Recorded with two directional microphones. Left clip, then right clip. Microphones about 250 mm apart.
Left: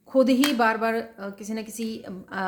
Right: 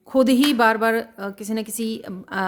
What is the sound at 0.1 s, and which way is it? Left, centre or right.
A woman's voice, right.